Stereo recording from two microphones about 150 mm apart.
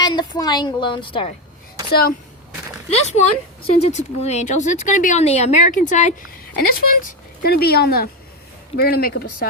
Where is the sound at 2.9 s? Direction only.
45° left (ahead or behind).